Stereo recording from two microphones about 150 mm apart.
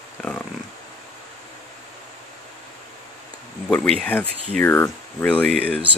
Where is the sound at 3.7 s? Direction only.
5° left (ahead or behind).